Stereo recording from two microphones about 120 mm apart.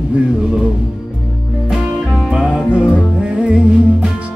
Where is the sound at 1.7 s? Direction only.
5° right (ahead or behind).